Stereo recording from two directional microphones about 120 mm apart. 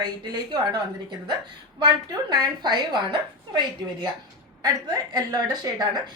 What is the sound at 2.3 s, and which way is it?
Speech, 40° right (ahead or behind).